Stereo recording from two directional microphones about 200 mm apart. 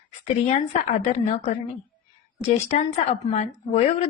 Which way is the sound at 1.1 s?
30° left (ahead or behind).